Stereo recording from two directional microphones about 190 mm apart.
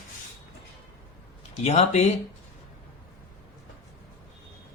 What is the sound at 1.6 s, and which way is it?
Speech, 35° left (ahead or behind).